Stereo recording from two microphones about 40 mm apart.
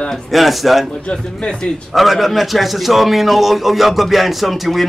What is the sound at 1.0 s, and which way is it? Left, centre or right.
Speech, left.